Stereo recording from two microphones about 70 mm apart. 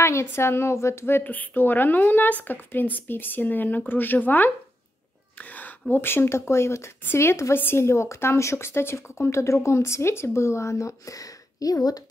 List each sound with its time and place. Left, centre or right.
0.0 s a woman's voice: left